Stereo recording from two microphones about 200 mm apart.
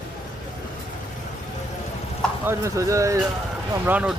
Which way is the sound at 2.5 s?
15° right (ahead or behind).